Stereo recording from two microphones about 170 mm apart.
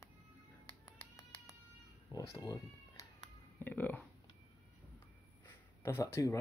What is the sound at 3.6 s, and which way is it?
Speech, 10° left (ahead or behind).